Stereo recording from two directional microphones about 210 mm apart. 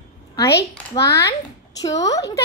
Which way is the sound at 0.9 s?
15° left (ahead or behind).